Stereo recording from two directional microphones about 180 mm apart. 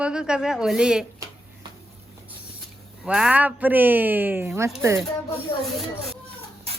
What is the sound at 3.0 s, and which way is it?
Speech, 5° right (ahead or behind).